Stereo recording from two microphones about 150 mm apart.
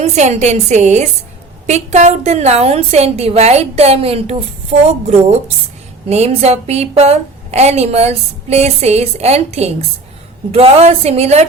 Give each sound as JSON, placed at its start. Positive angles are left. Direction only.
{"t": 0.0, "sound": "a woman's voice", "side_deg": -50}